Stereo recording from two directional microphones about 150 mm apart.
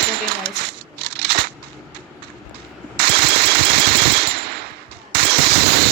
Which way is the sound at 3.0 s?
90° right.